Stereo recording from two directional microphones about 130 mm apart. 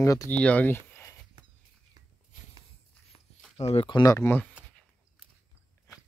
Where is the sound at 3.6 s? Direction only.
55° left (ahead or behind).